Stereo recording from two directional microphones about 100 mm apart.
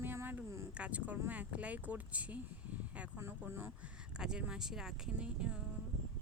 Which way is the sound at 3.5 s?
25° right (ahead or behind).